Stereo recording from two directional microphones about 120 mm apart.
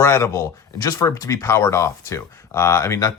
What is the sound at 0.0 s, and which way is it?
Speech, 20° left (ahead or behind).